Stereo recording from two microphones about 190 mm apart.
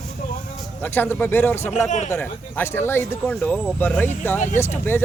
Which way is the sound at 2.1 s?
10° left (ahead or behind).